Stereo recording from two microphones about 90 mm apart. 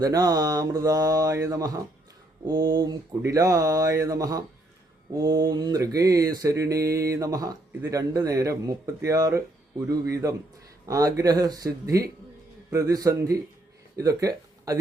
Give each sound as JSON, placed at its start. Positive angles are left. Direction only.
{"t": 0.0, "sound": "mantra", "side_deg": -45}
{"t": 2.5, "sound": "a sound", "side_deg": -45}
{"t": 3.2, "sound": "mantra", "side_deg": -40}
{"t": 13.9, "sound": "speech", "side_deg": -40}